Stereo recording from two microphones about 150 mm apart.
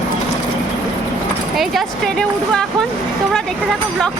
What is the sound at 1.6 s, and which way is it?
Speech, centre (ahead or behind).